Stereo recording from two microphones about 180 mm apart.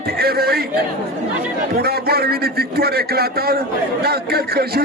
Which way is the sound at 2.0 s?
60° right (ahead or behind).